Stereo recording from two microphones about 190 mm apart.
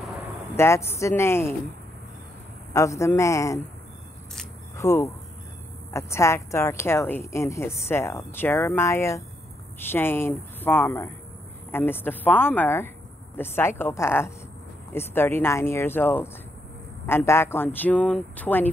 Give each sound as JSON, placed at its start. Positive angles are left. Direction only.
{"t": 0.6, "sound": "speech", "side_deg": 15}
{"t": 2.7, "sound": "speech", "side_deg": 15}
{"t": 4.7, "sound": "speech", "side_deg": 15}